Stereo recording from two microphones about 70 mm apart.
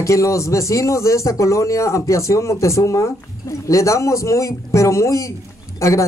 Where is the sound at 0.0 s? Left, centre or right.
Left.